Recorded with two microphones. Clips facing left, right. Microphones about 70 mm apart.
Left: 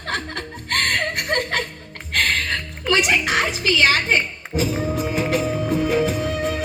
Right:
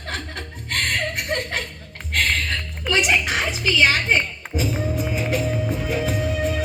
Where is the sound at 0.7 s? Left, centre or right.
Left.